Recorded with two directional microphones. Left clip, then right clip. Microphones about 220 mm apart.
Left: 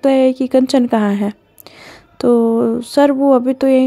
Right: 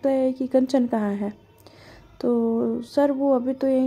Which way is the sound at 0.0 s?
35° left (ahead or behind).